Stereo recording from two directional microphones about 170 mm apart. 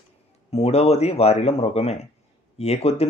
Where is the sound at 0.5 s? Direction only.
40° left (ahead or behind).